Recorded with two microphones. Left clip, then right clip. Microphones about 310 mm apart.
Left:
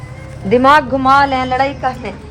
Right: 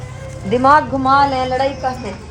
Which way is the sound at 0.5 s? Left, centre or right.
Left.